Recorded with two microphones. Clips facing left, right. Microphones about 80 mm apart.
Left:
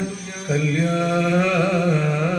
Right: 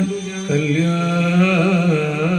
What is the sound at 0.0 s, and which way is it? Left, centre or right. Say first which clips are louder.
Music: right 6 dB; centre.